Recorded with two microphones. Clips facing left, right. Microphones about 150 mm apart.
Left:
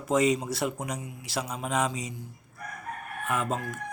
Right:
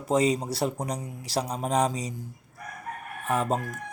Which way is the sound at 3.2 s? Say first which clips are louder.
Right 3 dB; 35° right (ahead or behind).